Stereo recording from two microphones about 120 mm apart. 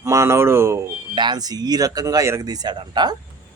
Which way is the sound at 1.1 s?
35° right (ahead or behind).